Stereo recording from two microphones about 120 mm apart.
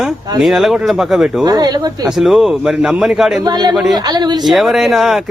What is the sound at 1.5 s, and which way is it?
Speech, 35° right (ahead or behind).